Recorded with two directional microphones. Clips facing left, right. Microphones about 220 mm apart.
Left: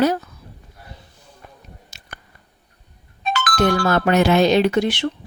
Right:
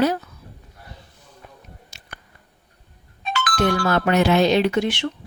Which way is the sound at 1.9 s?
40° left (ahead or behind).